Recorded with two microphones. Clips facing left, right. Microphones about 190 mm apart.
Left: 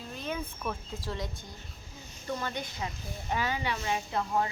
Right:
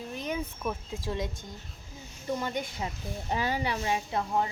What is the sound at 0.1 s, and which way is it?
Speech, 15° right (ahead or behind).